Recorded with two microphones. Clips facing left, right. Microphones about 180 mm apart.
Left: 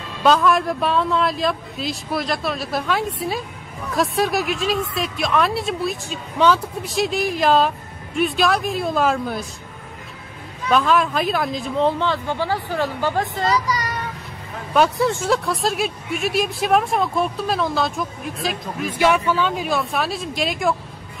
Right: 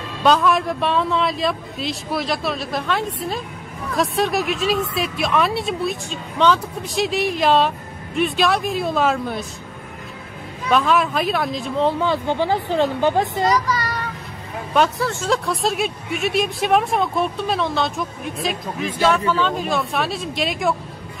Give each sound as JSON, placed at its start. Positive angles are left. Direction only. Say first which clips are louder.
{"t": 0.2, "sound": "speech", "louder": "even", "side_deg": 0}
{"t": 10.7, "sound": "speech", "louder": "even", "side_deg": 0}
{"t": 12.1, "sound": "speech", "louder": "right 3 dB", "side_deg": -20}
{"t": 13.7, "sound": "child singing", "louder": "right 1 dB", "side_deg": 15}
{"t": 15.2, "sound": "speech", "louder": "even", "side_deg": 0}